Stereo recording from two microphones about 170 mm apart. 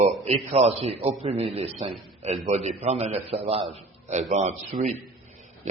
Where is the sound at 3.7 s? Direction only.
40° right (ahead or behind).